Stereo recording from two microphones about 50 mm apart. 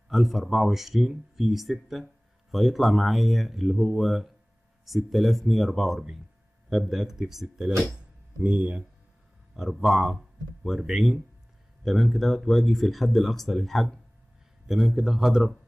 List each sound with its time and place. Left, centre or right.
0.1 s a man's voice: centre
8.5 s speech: right
9.6 s a man's voice: centre
14.7 s a man's voice: centre